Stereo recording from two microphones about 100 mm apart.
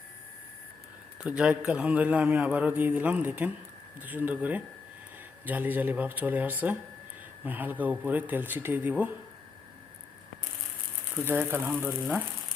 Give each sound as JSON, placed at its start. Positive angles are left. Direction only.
{"t": 1.2, "sound": "a man's voice", "side_deg": -10}
{"t": 11.1, "sound": "speech", "side_deg": -20}